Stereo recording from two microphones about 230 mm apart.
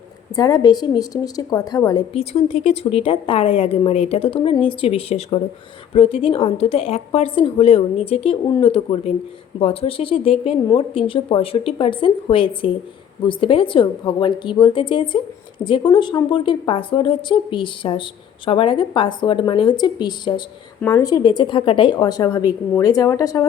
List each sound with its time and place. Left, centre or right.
0.3 s a woman's voice: centre